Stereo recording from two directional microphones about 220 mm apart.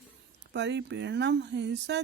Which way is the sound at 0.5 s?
50° right (ahead or behind).